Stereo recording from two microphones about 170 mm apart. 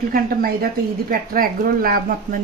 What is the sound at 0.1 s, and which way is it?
Speech, 60° right (ahead or behind).